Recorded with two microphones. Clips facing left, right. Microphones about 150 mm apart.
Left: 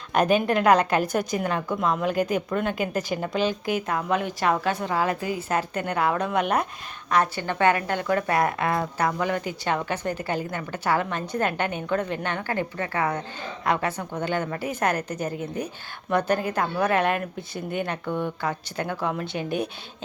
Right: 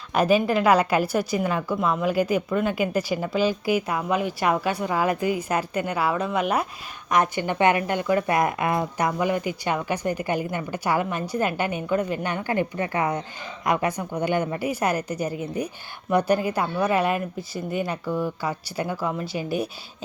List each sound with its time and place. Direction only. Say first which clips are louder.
0.1 s a woman's voice: right 1 dB; 5° right (ahead or behind)
7.1 s a woman's voice: right 1 dB; 15° right (ahead or behind)